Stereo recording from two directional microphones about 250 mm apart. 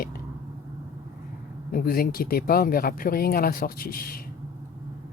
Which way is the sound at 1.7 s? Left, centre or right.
Left.